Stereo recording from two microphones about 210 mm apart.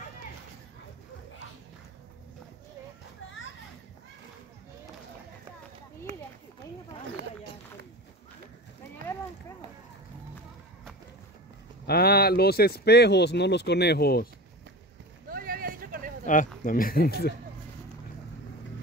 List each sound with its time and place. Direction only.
11.8 s speech: 50° left (ahead or behind)
15.2 s a sound: 45° right (ahead or behind)
16.3 s speech: 40° left (ahead or behind)